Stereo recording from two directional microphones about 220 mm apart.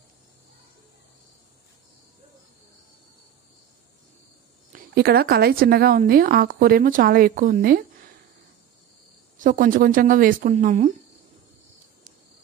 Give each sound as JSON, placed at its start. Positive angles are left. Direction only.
{"t": 4.7, "sound": "a woman's voice", "side_deg": -45}
{"t": 9.4, "sound": "a woman's voice", "side_deg": -40}